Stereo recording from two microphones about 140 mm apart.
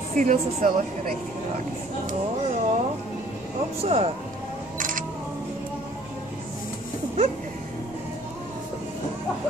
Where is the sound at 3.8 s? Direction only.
45° right (ahead or behind).